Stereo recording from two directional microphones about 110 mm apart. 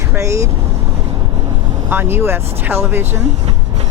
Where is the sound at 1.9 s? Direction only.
20° right (ahead or behind).